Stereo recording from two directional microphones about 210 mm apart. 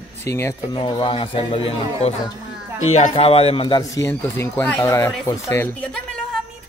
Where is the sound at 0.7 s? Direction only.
25° left (ahead or behind); by 6.0 s 10° left (ahead or behind).